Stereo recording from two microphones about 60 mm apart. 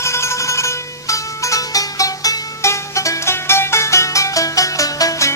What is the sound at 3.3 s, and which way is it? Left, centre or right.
Music, left.